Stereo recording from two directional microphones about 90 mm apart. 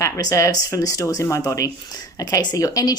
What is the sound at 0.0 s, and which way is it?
A woman's voice, 35° left (ahead or behind).